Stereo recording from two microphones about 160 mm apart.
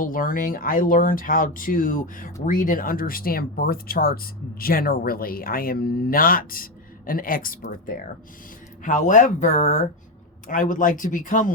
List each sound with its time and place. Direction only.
0.0 s speech: 60° left (ahead or behind)
8.8 s speech: 55° left (ahead or behind)